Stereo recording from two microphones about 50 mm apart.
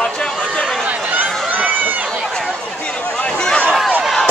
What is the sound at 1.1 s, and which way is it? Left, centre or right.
Run, right.